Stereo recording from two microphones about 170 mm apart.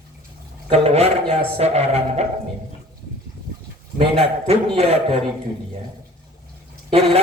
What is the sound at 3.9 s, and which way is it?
A man's voice, 35° right (ahead or behind).